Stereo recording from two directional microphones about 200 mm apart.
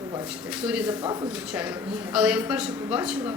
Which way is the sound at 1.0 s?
20° right (ahead or behind).